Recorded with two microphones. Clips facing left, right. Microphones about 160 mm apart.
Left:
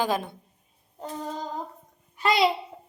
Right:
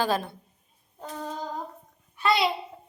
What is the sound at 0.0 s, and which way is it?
Speech, 20° left (ahead or behind).